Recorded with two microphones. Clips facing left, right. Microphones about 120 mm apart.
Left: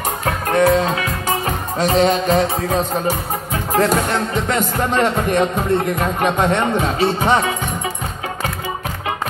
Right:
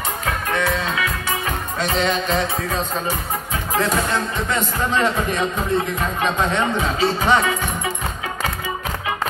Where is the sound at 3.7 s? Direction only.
35° left (ahead or behind).